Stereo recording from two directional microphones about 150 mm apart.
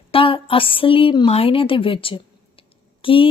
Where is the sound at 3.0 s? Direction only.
35° left (ahead or behind).